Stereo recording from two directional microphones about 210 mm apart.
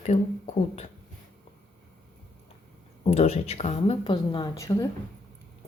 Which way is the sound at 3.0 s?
30° left (ahead or behind).